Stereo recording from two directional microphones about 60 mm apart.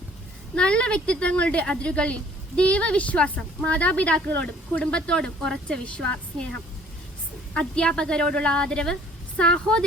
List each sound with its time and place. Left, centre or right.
0.5 s speech: centre
7.6 s a woman's voice: centre